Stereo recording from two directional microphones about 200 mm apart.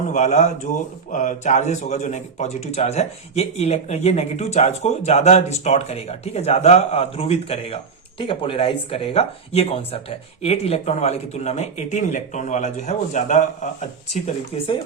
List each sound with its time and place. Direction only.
0.1 s speech: 35° left (ahead or behind)